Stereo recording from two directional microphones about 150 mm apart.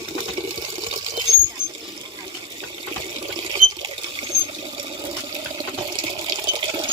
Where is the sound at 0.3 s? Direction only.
35° right (ahead or behind).